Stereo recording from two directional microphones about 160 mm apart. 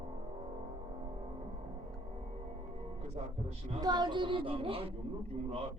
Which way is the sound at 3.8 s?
25° right (ahead or behind).